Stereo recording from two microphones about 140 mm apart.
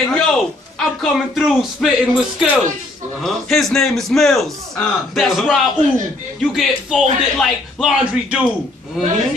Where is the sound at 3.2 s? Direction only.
Centre (ahead or behind).